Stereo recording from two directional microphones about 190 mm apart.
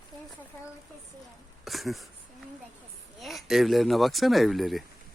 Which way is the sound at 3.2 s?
Centre (ahead or behind).